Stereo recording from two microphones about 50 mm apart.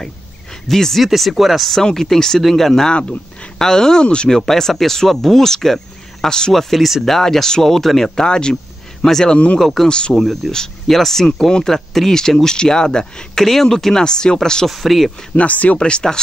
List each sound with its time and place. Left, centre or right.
0.7 s speech: centre
2.9 s speech: centre
4.4 s speech: centre
9.8 s speech: centre
10.1 s speech: centre
14.7 s speech: centre
15.3 s speech: left
15.8 s speech: centre